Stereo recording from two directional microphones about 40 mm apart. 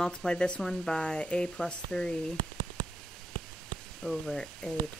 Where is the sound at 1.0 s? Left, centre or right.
Left.